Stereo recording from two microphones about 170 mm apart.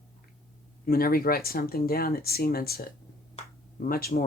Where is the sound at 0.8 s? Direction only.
60° left (ahead or behind).